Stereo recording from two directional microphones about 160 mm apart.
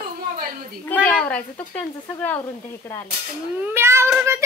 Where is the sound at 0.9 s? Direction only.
10° left (ahead or behind).